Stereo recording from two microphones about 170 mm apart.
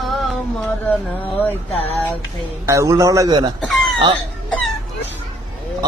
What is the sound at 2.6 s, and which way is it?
Music, 20° right (ahead or behind).